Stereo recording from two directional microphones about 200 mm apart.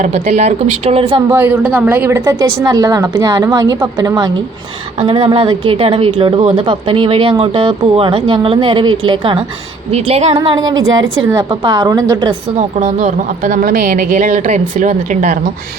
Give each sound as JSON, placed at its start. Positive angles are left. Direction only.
{"t": 0.0, "sound": "a woman's voice", "side_deg": -35}
{"t": 1.3, "sound": "a woman's voice", "side_deg": -10}
{"t": 4.9, "sound": "a woman's voice", "side_deg": -30}
{"t": 10.3, "sound": "a woman's voice", "side_deg": -20}
{"t": 12.5, "sound": "a woman's voice", "side_deg": -35}